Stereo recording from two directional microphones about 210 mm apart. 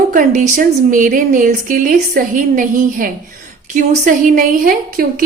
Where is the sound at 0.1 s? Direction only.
40° right (ahead or behind).